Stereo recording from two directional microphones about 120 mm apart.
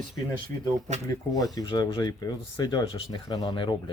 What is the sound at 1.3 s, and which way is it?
Speech, 30° left (ahead or behind).